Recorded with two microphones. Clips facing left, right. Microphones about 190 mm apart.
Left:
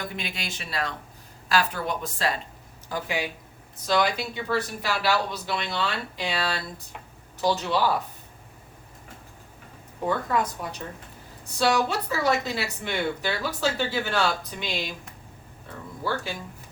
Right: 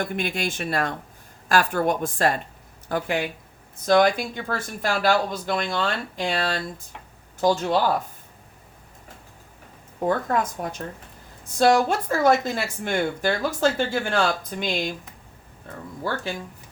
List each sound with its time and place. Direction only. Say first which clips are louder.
0.0 s speech: right 8 dB; 50° right (ahead or behind)
10.2 s speech: right 2 dB; 50° right (ahead or behind)